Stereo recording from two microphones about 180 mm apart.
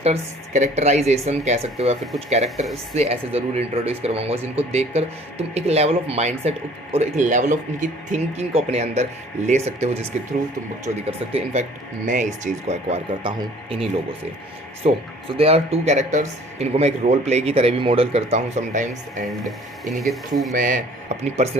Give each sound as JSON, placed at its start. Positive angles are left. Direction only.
{"t": 0.0, "sound": "speech", "side_deg": -40}
{"t": 14.8, "sound": "speech", "side_deg": -40}
{"t": 19.5, "sound": "speech", "side_deg": 0}
{"t": 20.5, "sound": "speech", "side_deg": -50}